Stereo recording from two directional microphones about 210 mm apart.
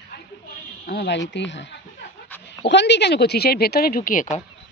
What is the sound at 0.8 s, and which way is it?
Speech, 55° left (ahead or behind).